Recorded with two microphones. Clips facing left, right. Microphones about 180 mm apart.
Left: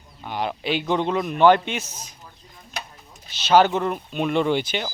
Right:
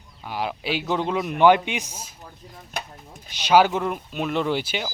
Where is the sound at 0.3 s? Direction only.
5° right (ahead or behind).